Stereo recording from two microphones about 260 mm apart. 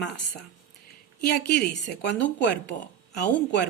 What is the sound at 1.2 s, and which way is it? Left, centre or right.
Speech, left.